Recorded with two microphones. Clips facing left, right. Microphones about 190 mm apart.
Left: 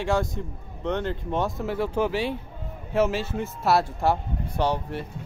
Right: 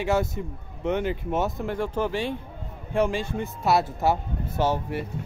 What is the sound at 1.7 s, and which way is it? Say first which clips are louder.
Speech: left 2 dB; 5° left (ahead or behind).